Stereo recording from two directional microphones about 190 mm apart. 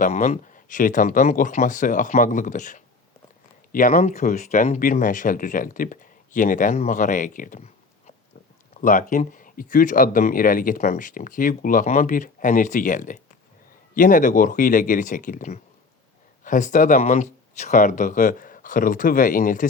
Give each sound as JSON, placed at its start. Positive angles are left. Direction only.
{"t": 0.0, "sound": "speech", "side_deg": 40}